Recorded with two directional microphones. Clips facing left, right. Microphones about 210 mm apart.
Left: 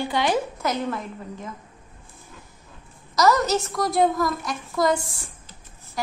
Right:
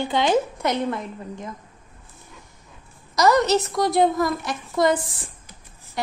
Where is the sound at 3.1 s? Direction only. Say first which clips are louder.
Right 2 dB; centre (ahead or behind).